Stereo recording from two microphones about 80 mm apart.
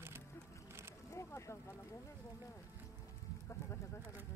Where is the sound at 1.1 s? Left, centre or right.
Left.